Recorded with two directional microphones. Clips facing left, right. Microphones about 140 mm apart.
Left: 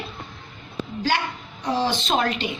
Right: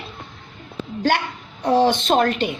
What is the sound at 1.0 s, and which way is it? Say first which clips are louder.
A woman's voice: right 4 dB; 55° right (ahead or behind).